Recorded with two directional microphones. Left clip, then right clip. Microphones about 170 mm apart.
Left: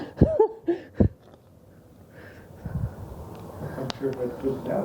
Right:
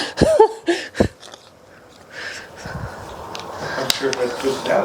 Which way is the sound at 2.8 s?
25° right (ahead or behind).